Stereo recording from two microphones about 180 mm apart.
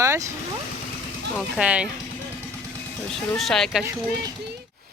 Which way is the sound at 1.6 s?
5° right (ahead or behind).